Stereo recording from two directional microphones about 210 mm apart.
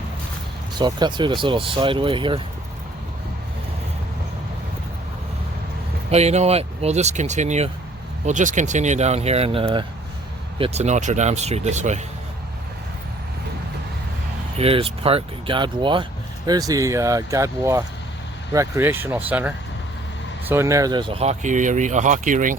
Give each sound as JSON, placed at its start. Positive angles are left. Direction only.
{"t": 0.8, "sound": "speech", "side_deg": -20}
{"t": 6.1, "sound": "speech", "side_deg": -30}
{"t": 14.6, "sound": "speech", "side_deg": -25}